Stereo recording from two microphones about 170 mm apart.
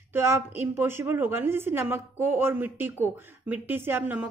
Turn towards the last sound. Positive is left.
turn(degrees=-10)  # may be behind; listen again after turning